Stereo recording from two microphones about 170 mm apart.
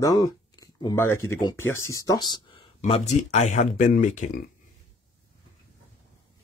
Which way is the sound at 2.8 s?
40° left (ahead or behind).